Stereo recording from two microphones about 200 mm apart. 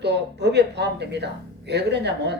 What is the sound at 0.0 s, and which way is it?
Speech, 55° right (ahead or behind).